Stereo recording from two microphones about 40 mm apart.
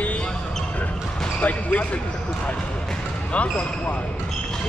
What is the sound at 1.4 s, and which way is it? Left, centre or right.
Speech, left.